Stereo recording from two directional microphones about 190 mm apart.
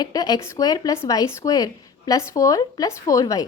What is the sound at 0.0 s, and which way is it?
A woman's voice, 20° left (ahead or behind).